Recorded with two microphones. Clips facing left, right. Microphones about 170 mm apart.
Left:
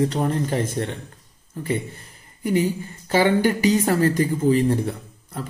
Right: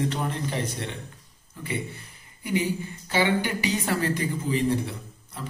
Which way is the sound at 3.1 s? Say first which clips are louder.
Left 6 dB; 45° left (ahead or behind).